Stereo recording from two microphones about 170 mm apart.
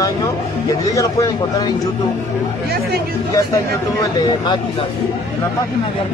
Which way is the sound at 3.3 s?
20° left (ahead or behind).